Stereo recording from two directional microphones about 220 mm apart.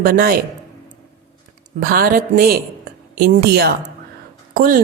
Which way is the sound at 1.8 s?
40° right (ahead or behind).